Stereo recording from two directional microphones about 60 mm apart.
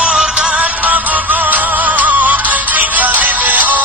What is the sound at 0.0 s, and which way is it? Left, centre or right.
Music, centre.